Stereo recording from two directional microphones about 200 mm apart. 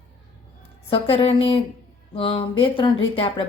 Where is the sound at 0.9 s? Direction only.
30° left (ahead or behind).